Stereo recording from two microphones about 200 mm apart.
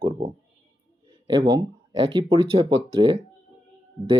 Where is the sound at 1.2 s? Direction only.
25° right (ahead or behind).